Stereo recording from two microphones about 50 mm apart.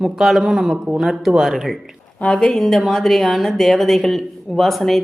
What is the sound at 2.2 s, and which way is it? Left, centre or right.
Speech, centre.